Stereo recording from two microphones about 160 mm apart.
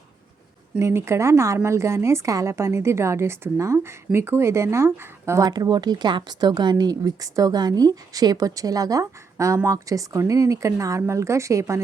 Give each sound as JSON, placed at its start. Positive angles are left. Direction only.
{"t": 0.8, "sound": "a woman's voice", "side_deg": -15}